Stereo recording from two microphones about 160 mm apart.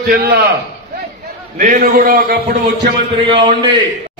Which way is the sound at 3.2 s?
30° right (ahead or behind).